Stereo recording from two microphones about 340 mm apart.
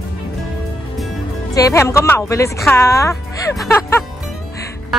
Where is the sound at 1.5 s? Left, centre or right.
Centre.